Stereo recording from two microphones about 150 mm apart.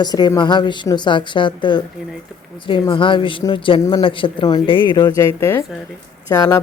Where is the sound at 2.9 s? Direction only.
35° left (ahead or behind).